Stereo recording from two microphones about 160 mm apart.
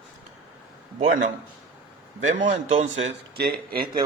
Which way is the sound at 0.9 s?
55° right (ahead or behind).